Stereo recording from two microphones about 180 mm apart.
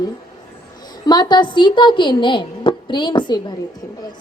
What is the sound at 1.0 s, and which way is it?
A woman's voice, 25° left (ahead or behind).